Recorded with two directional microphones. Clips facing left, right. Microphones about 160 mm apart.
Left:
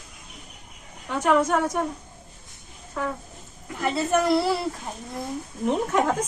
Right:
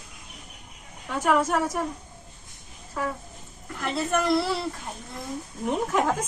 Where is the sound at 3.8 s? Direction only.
10° left (ahead or behind).